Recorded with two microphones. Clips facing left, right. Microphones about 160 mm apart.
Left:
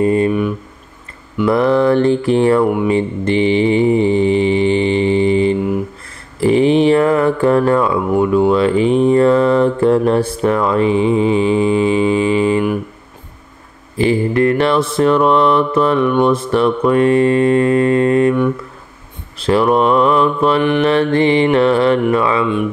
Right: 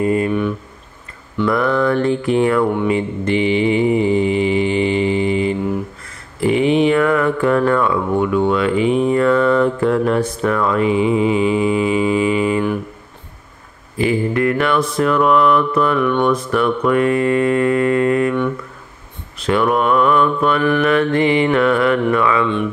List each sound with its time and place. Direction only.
0.0 s mantra: 30° left (ahead or behind)
1.5 s mantra: 30° left (ahead or behind)
2.6 s speech: 10° left (ahead or behind)
2.9 s mantra: 30° left (ahead or behind)
6.4 s a sound: 30° left (ahead or behind)
8.5 s mantra: 30° left (ahead or behind)
13.9 s mantra: 30° left (ahead or behind)
19.3 s mantra: 30° left (ahead or behind)
22.4 s speech: 10° left (ahead or behind)